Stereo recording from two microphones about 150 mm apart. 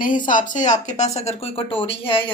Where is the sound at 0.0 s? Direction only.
60° left (ahead or behind).